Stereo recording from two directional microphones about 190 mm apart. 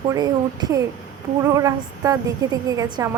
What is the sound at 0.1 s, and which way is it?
A woman's voice, 20° right (ahead or behind).